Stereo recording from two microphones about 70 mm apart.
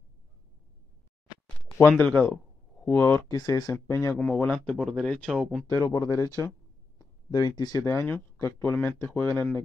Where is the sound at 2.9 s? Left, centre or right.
Left.